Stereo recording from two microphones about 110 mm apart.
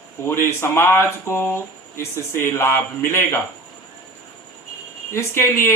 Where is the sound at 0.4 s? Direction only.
20° left (ahead or behind).